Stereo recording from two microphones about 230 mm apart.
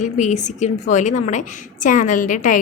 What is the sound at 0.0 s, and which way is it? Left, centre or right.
A woman's voice, left.